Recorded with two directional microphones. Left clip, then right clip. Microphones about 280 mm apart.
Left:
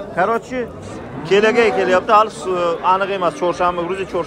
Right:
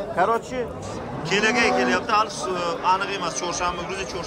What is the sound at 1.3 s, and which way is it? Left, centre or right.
A man's voice, centre.